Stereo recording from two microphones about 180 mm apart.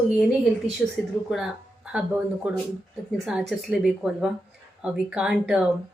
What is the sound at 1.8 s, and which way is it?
Speech, 5° right (ahead or behind).